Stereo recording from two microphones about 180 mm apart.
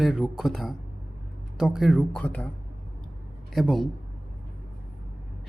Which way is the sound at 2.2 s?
10° left (ahead or behind).